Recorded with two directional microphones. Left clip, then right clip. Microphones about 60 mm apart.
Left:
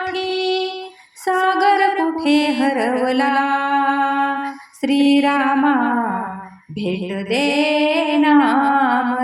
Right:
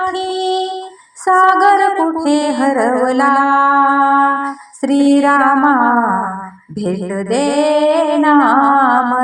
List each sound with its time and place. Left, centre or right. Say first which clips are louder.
0.0 s female singing: right 4 dB; right
1.2 s music: right 7 dB; right
6.7 s female singing: right 4 dB; right; by 9.2 s centre